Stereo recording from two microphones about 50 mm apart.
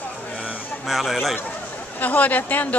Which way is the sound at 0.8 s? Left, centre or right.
Centre.